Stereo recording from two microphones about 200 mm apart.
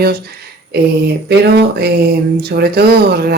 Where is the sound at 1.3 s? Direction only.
55° right (ahead or behind).